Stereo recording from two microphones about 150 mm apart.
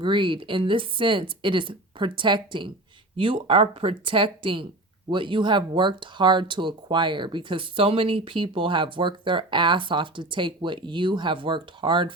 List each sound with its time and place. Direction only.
0.0 s speech: 35° right (ahead or behind)